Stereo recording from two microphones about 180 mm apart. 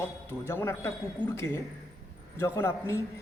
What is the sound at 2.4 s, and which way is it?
Speech, 15° left (ahead or behind).